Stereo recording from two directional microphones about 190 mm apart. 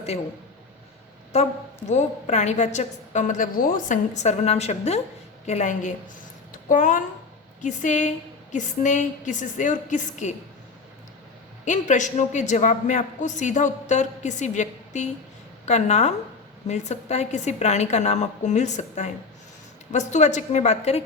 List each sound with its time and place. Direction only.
1.9 s a man's voice: 35° left (ahead or behind)
11.6 s a man's voice: 40° left (ahead or behind)